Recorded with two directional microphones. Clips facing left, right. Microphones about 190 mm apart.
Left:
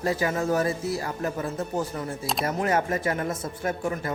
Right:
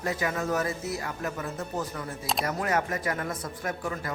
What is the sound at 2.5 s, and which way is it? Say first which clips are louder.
Speech: left 5 dB; 25° left (ahead or behind).